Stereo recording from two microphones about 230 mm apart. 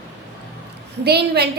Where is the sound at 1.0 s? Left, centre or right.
Right.